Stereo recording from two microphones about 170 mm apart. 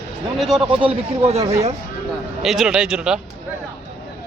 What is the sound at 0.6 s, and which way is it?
Speech, 35° right (ahead or behind).